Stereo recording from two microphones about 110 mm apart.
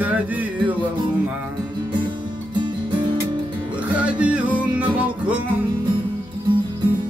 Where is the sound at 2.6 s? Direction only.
45° right (ahead or behind).